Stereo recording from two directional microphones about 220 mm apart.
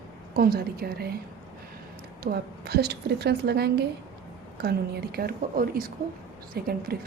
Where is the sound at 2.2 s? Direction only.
45° right (ahead or behind).